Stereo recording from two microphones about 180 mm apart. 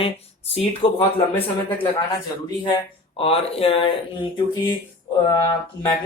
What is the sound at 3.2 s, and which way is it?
Speech, 30° left (ahead or behind).